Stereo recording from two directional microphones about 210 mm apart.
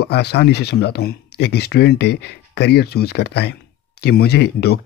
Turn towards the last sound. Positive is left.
turn(degrees=50)  # may be behind; listen again after turning